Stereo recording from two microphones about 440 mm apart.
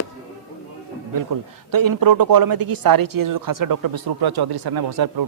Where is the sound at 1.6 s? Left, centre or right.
Right.